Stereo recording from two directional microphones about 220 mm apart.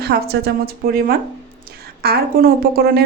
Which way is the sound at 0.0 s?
45° right (ahead or behind).